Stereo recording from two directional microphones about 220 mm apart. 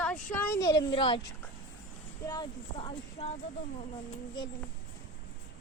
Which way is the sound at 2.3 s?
20° left (ahead or behind).